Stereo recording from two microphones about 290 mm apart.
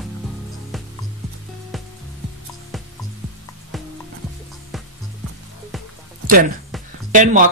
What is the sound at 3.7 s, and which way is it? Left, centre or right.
Music, centre.